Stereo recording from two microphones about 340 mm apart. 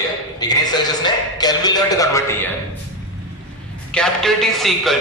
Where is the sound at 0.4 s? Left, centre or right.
Centre.